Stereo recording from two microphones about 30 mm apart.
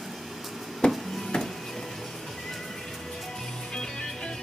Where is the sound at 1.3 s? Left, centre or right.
Left.